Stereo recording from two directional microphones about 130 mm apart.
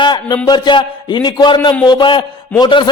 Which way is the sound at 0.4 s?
35° left (ahead or behind).